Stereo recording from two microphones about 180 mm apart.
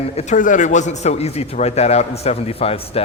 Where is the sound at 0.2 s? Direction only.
45° left (ahead or behind).